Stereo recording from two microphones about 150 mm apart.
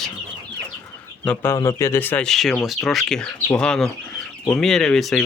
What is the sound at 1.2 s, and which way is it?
Speech, 10° left (ahead or behind).